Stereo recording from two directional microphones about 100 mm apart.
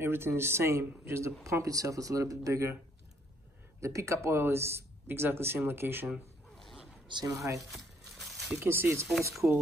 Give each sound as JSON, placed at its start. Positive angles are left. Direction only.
{"t": 0.0, "sound": "speech", "side_deg": -25}
{"t": 3.8, "sound": "speech", "side_deg": -30}
{"t": 6.5, "sound": "zipper", "side_deg": 0}
{"t": 7.2, "sound": "speech", "side_deg": -35}
{"t": 7.7, "sound": "crumpling", "side_deg": 0}
{"t": 8.5, "sound": "speech", "side_deg": -25}